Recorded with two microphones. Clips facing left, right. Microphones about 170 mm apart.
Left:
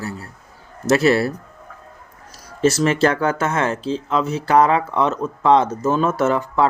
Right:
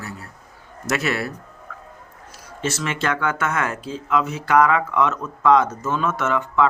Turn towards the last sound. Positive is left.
turn(degrees=35)  # may be behind; listen again after turning